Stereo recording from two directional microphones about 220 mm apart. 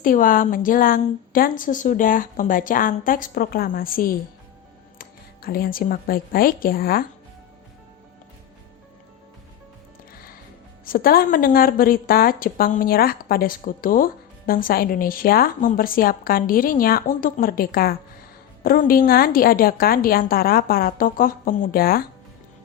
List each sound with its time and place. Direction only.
0.0 s a woman's voice: 40° left (ahead or behind)
10.8 s a woman's voice: 40° left (ahead or behind)